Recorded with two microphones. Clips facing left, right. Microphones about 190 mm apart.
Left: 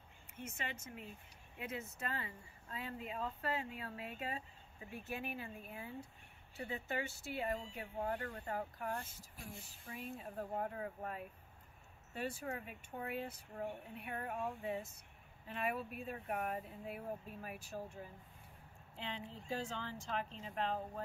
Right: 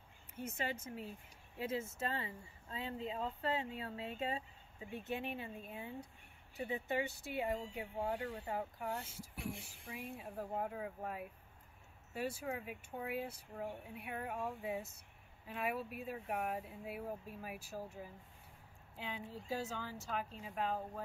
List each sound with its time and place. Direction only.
0.4 s speech: 35° right (ahead or behind); by 9.0 s 10° right (ahead or behind)
9.3 s speech: 75° right (ahead or behind)
9.8 s speech: 10° right (ahead or behind)